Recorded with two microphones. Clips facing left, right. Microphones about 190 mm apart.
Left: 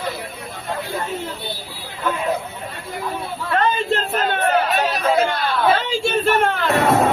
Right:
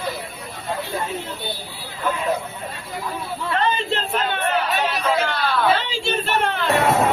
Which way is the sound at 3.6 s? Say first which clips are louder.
Left 3 dB; 45° left (ahead or behind).